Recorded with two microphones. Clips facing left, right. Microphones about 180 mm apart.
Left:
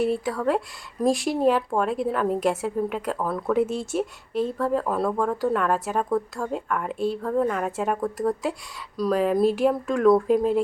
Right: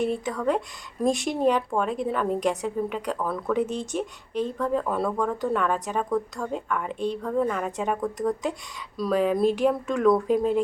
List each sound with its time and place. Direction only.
0.0 s speech: 5° left (ahead or behind)